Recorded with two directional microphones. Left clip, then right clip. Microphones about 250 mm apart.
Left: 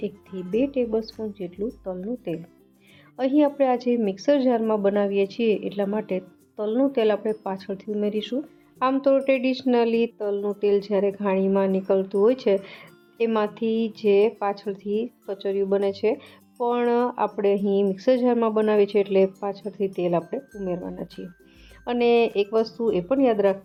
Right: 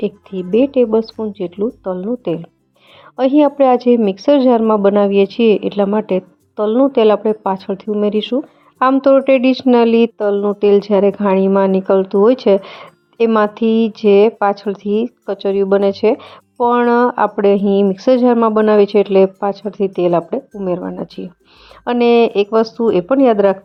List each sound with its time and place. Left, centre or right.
0.0 s speech: right